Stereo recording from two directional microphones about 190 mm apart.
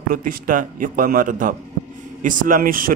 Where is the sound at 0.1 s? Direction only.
45° right (ahead or behind).